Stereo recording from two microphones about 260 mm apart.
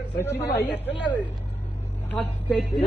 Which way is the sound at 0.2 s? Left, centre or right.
Centre.